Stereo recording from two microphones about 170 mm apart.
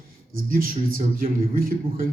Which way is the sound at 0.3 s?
55° right (ahead or behind).